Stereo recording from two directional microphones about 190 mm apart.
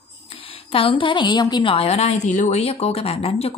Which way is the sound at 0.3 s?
30° left (ahead or behind).